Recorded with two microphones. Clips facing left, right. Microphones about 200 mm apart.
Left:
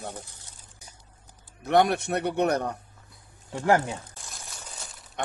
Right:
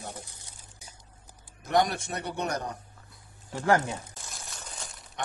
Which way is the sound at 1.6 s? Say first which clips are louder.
Left 4 dB; 60° left (ahead or behind).